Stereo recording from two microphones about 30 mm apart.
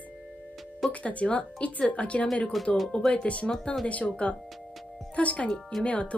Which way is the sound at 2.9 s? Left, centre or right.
Left.